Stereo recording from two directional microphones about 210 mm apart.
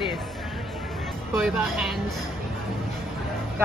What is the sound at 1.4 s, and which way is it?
Speech, 5° right (ahead or behind).